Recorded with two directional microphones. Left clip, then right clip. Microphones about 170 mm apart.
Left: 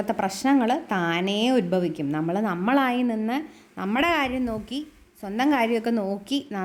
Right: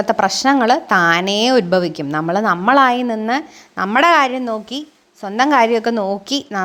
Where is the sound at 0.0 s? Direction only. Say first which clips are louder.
Right 11 dB; 5° right (ahead or behind).